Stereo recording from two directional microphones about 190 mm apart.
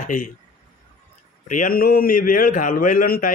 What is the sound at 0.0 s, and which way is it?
Speech, 45° left (ahead or behind).